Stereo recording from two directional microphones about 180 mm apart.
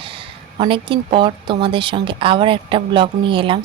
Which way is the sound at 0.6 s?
30° right (ahead or behind).